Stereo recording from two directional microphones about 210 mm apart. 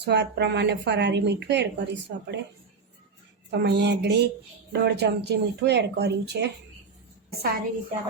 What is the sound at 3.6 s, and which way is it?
Speech, 50° right (ahead or behind).